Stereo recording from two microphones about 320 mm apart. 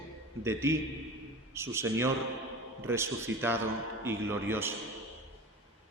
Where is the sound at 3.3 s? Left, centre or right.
Right.